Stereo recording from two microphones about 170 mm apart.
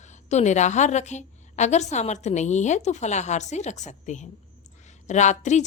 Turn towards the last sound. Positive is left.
turn(degrees=45)  # may be behind; listen again after turning